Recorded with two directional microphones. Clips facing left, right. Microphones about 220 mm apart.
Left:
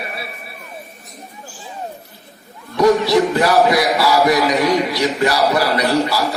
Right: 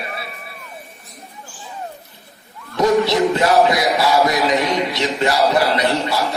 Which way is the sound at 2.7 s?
25° right (ahead or behind).